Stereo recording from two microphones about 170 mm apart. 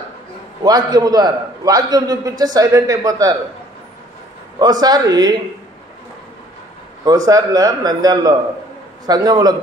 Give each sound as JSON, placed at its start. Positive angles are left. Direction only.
{"t": 0.7, "sound": "a man's voice", "side_deg": -25}
{"t": 4.6, "sound": "a man's voice", "side_deg": -25}
{"t": 7.1, "sound": "a man's voice", "side_deg": -20}